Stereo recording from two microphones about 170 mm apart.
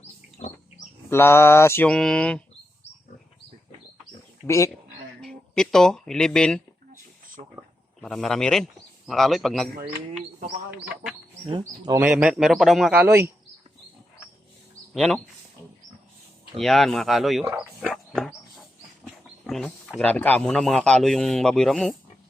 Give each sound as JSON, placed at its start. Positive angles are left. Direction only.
{"t": 1.1, "sound": "mantra", "side_deg": 15}
{"t": 4.4, "sound": "mantra", "side_deg": 20}
{"t": 5.2, "sound": "speech", "side_deg": 5}
{"t": 7.4, "sound": "a sound", "side_deg": -45}
{"t": 8.0, "sound": "speech", "side_deg": 0}
{"t": 11.5, "sound": "speech", "side_deg": -25}
{"t": 11.9, "sound": "speech", "side_deg": -5}
{"t": 13.1, "sound": "speech", "side_deg": -15}
{"t": 14.9, "sound": "speech", "side_deg": 5}
{"t": 16.6, "sound": "speech", "side_deg": 0}
{"t": 17.4, "sound": "speech", "side_deg": -15}
{"t": 17.8, "sound": "a sound", "side_deg": 0}
{"t": 19.5, "sound": "speech", "side_deg": 0}